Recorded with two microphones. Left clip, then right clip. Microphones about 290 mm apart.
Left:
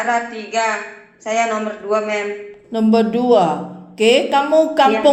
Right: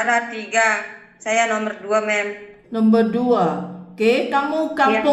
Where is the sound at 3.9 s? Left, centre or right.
Right.